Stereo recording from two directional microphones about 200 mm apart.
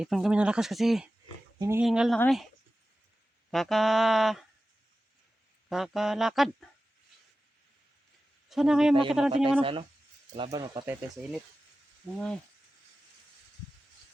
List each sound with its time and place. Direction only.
0.0 s speech: 5° right (ahead or behind)
1.5 s speech: 15° right (ahead or behind)
1.8 s speech: centre (ahead or behind)
3.5 s speech: centre (ahead or behind)
5.6 s speech: centre (ahead or behind)
8.4 s speech: 5° right (ahead or behind)
9.3 s speech: 25° right (ahead or behind)
12.0 s speech: 5° left (ahead or behind)